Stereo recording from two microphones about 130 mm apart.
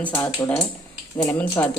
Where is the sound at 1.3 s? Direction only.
20° left (ahead or behind).